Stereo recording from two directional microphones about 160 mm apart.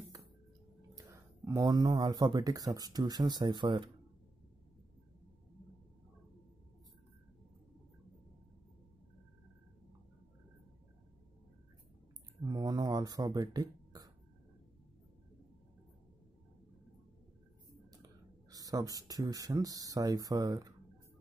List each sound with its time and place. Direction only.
0.9 s speech: 20° right (ahead or behind)
12.4 s a sound: 20° right (ahead or behind)
18.5 s speech: 20° right (ahead or behind)